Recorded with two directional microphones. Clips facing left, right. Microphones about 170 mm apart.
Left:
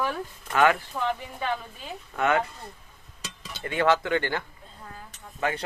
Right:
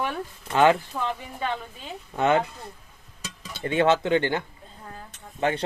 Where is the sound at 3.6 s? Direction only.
25° right (ahead or behind).